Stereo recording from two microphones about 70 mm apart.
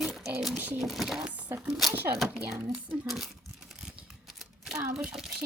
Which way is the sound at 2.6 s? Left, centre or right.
Centre.